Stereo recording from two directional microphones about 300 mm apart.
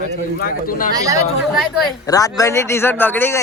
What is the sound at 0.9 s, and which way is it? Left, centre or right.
Speech, centre.